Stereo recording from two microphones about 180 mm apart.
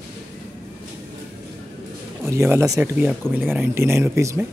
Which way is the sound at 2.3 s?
15° right (ahead or behind).